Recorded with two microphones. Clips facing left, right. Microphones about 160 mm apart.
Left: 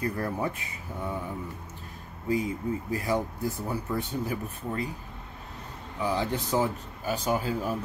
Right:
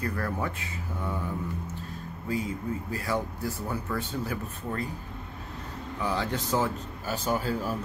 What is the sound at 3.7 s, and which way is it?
Speech, 15° left (ahead or behind).